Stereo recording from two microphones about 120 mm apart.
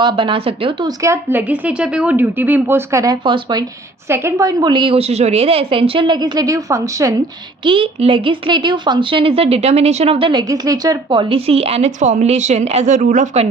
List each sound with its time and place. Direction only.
0.0 s speech: 40° right (ahead or behind)
0.9 s a woman's voice: 25° right (ahead or behind)
3.2 s speech: 45° right (ahead or behind)
4.1 s a woman's voice: 20° right (ahead or behind)
7.6 s speech: 45° right (ahead or behind)
10.5 s a woman's voice: 30° right (ahead or behind)
11.2 s speech: 50° right (ahead or behind); by 13.5 s 75° right (ahead or behind)